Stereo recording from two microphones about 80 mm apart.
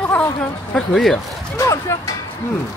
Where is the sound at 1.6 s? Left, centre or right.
Left.